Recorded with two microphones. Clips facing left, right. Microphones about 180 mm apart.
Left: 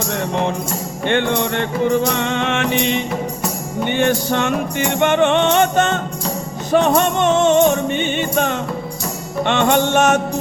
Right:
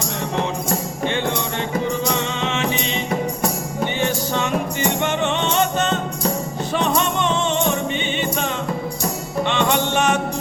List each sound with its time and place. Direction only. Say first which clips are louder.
1.0 s music: left 6 dB; 60° left (ahead or behind)